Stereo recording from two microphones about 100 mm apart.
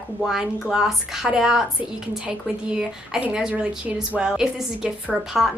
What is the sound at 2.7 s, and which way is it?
A woman's voice, 10° right (ahead or behind).